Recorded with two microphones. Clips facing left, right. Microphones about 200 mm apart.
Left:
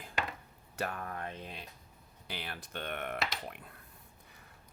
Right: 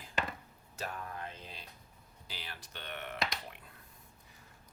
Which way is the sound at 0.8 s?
55° left (ahead or behind).